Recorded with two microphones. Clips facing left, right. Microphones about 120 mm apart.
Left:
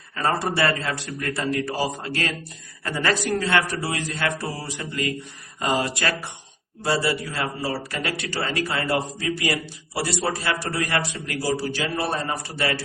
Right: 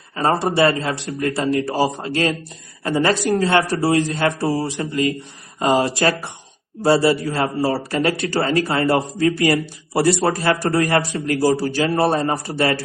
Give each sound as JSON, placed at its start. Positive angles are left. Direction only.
{"t": 0.2, "sound": "a man's voice", "side_deg": -25}